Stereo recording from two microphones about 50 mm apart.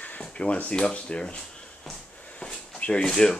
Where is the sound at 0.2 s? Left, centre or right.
Left.